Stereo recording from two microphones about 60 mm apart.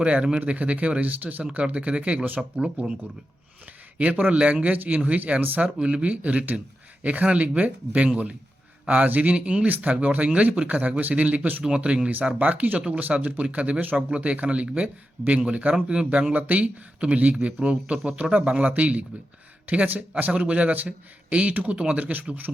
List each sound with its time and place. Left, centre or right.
0.0 s speech: centre
3.9 s speech: right
5.8 s speech: right